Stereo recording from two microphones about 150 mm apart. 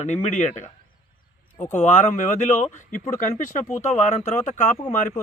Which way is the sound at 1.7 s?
50° left (ahead or behind).